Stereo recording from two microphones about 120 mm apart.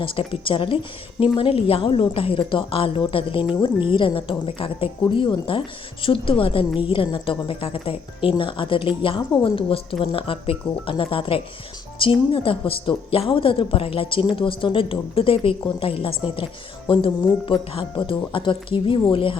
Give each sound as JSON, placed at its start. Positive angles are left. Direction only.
{"t": 0.0, "sound": "speech", "side_deg": 50}